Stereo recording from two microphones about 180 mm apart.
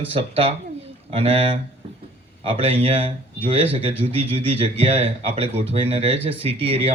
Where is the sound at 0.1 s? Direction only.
30° right (ahead or behind).